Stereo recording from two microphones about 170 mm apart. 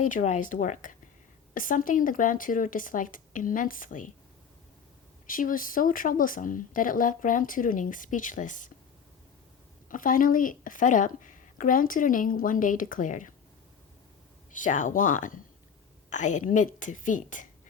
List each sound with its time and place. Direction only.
0.1 s speech: 50° left (ahead or behind)
5.2 s speech: 55° left (ahead or behind)
9.9 s speech: 55° left (ahead or behind)
14.5 s speech: 50° left (ahead or behind)